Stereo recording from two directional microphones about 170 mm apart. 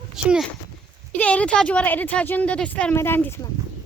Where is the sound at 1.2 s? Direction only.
5° left (ahead or behind).